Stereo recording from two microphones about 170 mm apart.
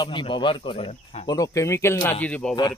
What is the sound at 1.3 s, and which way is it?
Speech, 15° left (ahead or behind).